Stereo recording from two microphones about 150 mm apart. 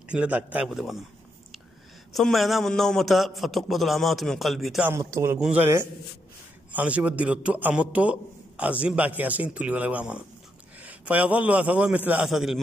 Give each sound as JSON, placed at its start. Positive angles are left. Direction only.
{"t": 0.1, "sound": "a man's voice", "side_deg": -10}
{"t": 2.1, "sound": "a man's voice", "side_deg": 0}
{"t": 4.8, "sound": "a man's voice", "side_deg": -15}
{"t": 6.7, "sound": "a man's voice", "side_deg": -10}